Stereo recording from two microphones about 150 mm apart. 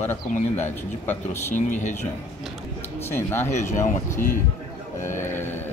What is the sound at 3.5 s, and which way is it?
Speech, 50° left (ahead or behind).